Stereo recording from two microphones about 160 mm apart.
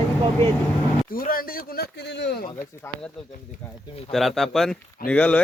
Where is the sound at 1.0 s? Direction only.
65° left (ahead or behind); by 2.4 s 90° left.